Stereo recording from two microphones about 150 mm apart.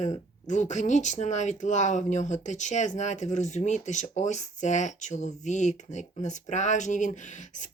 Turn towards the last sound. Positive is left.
turn(degrees=55)  # may be behind; listen again after turning